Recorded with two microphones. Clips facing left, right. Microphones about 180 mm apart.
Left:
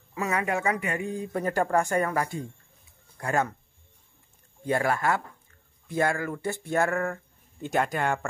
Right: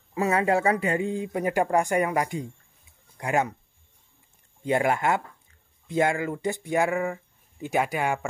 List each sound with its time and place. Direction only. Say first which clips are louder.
0.1 s speech: right 5 dB; 30° right (ahead or behind)
4.6 s speech: right 2 dB; 20° right (ahead or behind)